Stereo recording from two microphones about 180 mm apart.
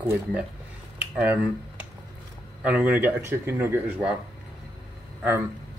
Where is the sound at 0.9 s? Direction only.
10° right (ahead or behind).